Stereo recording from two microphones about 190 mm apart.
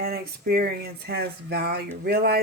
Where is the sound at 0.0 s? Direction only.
55° right (ahead or behind).